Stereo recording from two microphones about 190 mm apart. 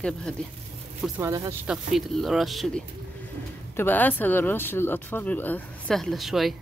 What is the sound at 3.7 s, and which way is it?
Speech, 10° left (ahead or behind).